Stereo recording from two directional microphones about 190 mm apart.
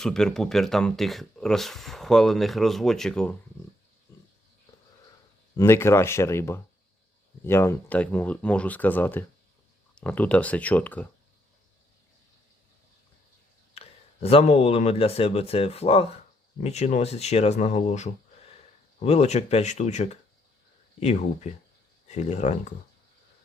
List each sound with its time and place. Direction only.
0.0 s speech: 5° left (ahead or behind)
5.5 s speech: 15° left (ahead or behind)
13.7 s speech: 30° left (ahead or behind)